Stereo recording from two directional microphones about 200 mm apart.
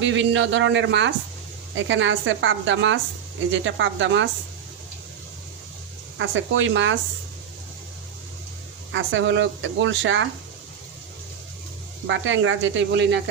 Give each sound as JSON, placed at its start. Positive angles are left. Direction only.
{"t": 0.0, "sound": "speech", "side_deg": -65}
{"t": 6.1, "sound": "speech", "side_deg": -70}
{"t": 8.9, "sound": "speech", "side_deg": -70}
{"t": 12.0, "sound": "speech", "side_deg": -70}